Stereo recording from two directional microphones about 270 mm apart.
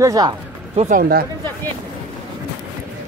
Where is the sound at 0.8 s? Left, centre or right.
Right.